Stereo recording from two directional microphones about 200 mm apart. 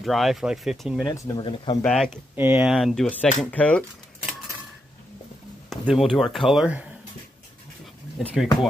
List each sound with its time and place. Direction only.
0.0 s speech: centre (ahead or behind)
1.0 s speech: 15° left (ahead or behind)
1.8 s speech: 5° left (ahead or behind)
2.3 s speech: 10° right (ahead or behind); by 3.8 s 5° left (ahead or behind)
5.7 s speech: centre (ahead or behind)
8.4 s speech: centre (ahead or behind)